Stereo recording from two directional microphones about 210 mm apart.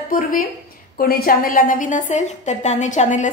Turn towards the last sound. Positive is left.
turn(degrees=35)  # may be behind; listen again after turning